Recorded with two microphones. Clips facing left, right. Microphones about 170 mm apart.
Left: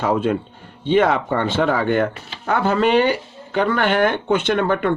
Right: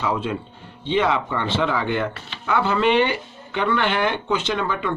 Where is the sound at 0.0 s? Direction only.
50° left (ahead or behind).